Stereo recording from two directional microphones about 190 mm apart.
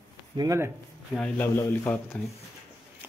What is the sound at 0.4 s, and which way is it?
Speech, 15° right (ahead or behind).